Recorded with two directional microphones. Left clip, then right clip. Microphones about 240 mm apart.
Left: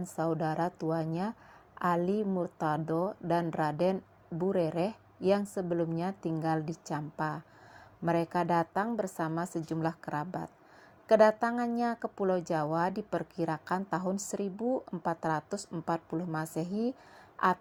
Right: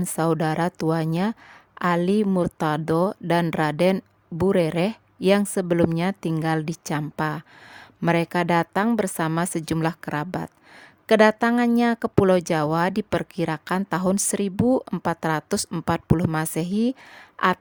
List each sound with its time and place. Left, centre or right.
0.2 s speech: right
8.9 s a woman's voice: right
9.6 s a woman's voice: right